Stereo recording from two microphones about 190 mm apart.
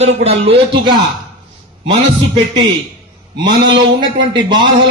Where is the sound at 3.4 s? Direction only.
25° right (ahead or behind).